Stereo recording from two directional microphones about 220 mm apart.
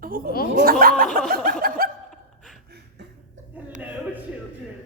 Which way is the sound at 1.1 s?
40° right (ahead or behind).